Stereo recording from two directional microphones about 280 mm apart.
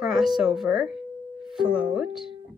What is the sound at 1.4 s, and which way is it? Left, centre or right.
Speech, centre.